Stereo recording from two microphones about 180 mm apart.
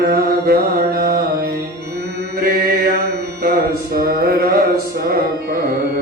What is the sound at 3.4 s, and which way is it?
Mantra, 55° right (ahead or behind).